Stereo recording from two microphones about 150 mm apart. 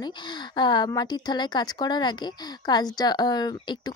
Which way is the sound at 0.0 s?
30° left (ahead or behind).